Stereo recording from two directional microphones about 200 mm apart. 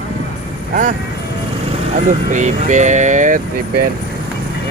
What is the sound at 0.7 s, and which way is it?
Speech, 40° right (ahead or behind).